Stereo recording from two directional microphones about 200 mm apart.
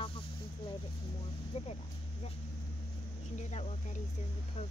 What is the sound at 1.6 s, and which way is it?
Speech, 30° left (ahead or behind).